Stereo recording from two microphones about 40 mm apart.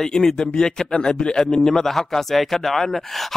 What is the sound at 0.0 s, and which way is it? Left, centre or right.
Speech, centre.